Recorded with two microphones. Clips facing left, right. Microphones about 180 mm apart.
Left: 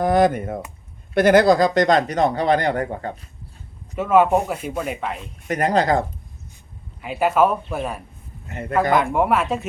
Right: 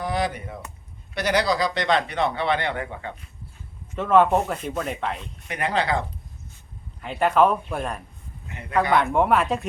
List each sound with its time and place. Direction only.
0.0 s speech: 50° left (ahead or behind)
3.9 s speech: 10° left (ahead or behind)
5.5 s speech: 45° left (ahead or behind)
7.0 s speech: 5° left (ahead or behind)
8.4 s a man's voice: 45° left (ahead or behind)
9.1 s speech: centre (ahead or behind)